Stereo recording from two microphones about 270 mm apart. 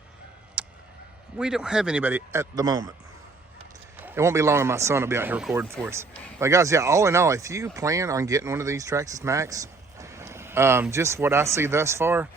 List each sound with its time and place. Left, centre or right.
0.6 s clicking: centre
1.4 s speech: centre
4.0 s speech: centre